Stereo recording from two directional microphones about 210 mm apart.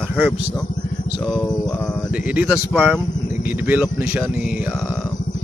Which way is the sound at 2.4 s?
5° right (ahead or behind).